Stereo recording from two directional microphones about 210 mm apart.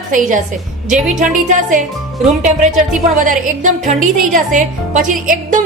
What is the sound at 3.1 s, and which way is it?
A woman's voice, 35° right (ahead or behind).